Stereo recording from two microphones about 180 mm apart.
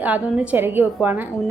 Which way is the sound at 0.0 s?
10° right (ahead or behind).